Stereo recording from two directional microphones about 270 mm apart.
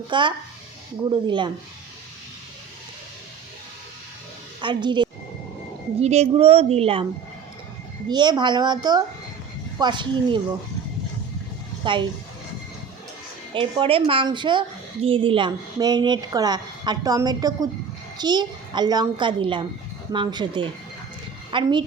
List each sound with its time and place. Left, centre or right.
0.1 s a woman's voice: centre
4.6 s a woman's voice: centre
8.1 s a woman's voice: centre
11.8 s a woman's voice: centre
13.5 s a child's voice: centre